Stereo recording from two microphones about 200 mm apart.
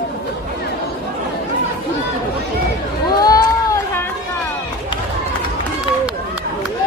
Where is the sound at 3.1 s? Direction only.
20° left (ahead or behind).